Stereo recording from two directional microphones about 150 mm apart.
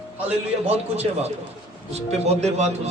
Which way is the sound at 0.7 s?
45° right (ahead or behind).